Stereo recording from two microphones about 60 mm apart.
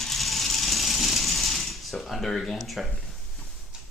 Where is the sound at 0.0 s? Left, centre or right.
Centre.